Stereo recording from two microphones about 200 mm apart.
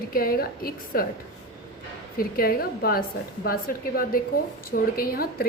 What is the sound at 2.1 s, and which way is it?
A woman's voice, 50° left (ahead or behind).